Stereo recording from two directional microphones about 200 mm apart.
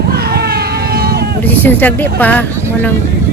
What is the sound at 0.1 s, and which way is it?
Vehicle, 50° right (ahead or behind).